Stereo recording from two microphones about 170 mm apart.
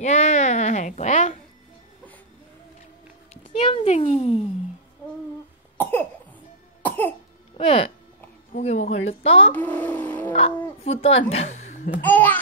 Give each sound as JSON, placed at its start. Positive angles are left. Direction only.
{"t": 0.0, "sound": "a woman's voice", "side_deg": 40}
{"t": 3.5, "sound": "a child's voice", "side_deg": 40}
{"t": 5.8, "sound": "cough", "side_deg": 10}
{"t": 7.5, "sound": "a child's voice", "side_deg": 35}
{"t": 9.5, "sound": "a child's voice", "side_deg": 10}
{"t": 10.8, "sound": "a woman's voice", "side_deg": 35}
{"t": 12.0, "sound": "speech", "side_deg": 10}